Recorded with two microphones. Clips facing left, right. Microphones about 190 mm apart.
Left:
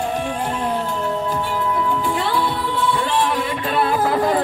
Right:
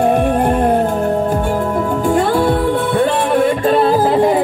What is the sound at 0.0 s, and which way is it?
Music, 55° right (ahead or behind).